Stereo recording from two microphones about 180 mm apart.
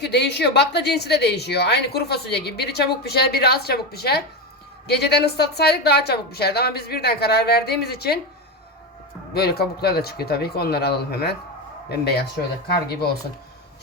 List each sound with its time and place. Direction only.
0.0 s a woman's voice: 70° left (ahead or behind)
9.3 s a woman's voice: 60° left (ahead or behind)